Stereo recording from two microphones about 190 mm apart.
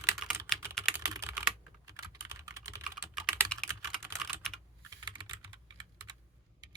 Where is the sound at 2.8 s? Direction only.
Centre (ahead or behind).